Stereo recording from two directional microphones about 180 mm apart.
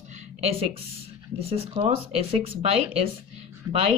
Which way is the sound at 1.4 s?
35° right (ahead or behind).